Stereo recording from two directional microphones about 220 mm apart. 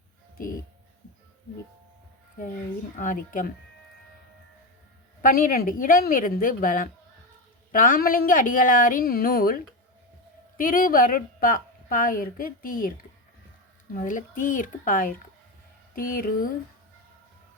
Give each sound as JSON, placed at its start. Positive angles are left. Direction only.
{"t": 3.0, "sound": "a woman's voice", "side_deg": 40}
{"t": 5.2, "sound": "a woman's voice", "side_deg": 40}
{"t": 10.6, "sound": "a woman's voice", "side_deg": 40}
{"t": 13.9, "sound": "a woman's voice", "side_deg": 35}